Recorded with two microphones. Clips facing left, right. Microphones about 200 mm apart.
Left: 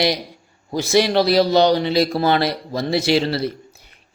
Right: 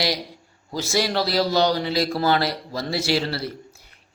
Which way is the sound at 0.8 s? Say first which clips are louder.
Left 7 dB; 20° left (ahead or behind).